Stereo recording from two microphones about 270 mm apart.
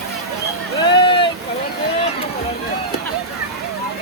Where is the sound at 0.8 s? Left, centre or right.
Centre.